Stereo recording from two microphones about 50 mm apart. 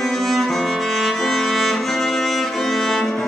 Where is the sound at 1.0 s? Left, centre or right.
Centre.